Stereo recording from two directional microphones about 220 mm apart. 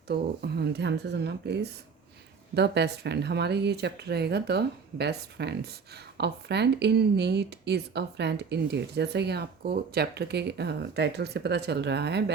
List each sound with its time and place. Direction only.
0.1 s speech: 50° right (ahead or behind)
2.6 s speech: 50° right (ahead or behind)